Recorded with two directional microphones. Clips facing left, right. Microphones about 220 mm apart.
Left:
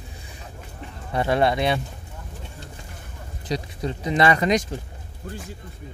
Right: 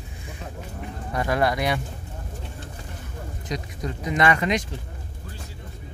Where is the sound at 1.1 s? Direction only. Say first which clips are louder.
Left 3 dB; 25° left (ahead or behind).